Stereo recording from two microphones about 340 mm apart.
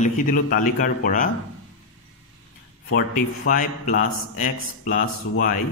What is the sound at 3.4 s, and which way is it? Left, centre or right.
A man's voice, left.